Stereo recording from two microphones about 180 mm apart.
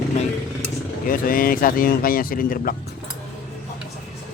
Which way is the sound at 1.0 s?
50° left (ahead or behind).